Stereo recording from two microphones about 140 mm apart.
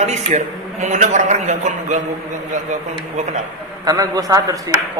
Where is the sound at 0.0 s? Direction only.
55° right (ahead or behind).